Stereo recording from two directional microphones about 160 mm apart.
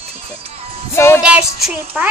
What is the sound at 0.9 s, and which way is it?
Speech, 15° left (ahead or behind).